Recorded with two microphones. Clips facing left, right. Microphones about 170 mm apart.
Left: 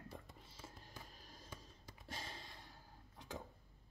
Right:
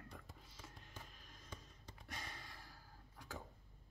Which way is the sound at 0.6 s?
30° left (ahead or behind).